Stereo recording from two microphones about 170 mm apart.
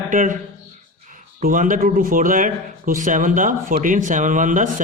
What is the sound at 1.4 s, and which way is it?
Speech, 55° right (ahead or behind).